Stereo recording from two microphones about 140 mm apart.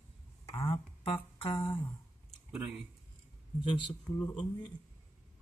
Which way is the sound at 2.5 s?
5° right (ahead or behind).